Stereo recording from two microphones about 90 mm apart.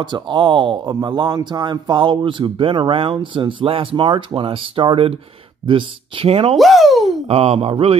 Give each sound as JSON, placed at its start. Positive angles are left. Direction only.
{"t": 0.0, "sound": "speech", "side_deg": -60}
{"t": 6.5, "sound": "speech", "side_deg": 0}
{"t": 7.2, "sound": "speech", "side_deg": -90}